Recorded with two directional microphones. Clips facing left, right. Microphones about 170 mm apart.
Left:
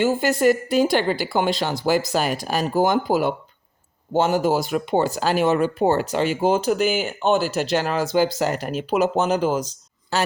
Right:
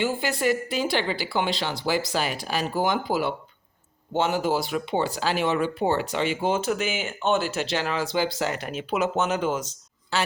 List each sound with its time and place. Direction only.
0.0 s speech: 45° left (ahead or behind)